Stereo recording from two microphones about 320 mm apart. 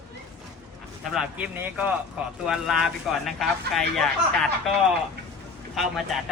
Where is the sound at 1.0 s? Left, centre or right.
Centre.